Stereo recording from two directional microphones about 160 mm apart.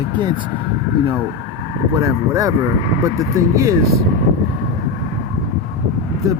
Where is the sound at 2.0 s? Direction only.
20° right (ahead or behind).